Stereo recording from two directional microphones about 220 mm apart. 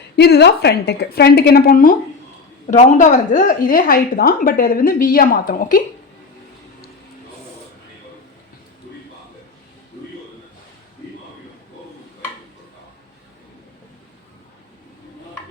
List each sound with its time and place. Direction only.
0.2 s a woman's voice: 50° left (ahead or behind)